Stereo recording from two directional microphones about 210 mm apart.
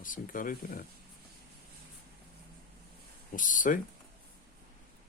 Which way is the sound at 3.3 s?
40° left (ahead or behind).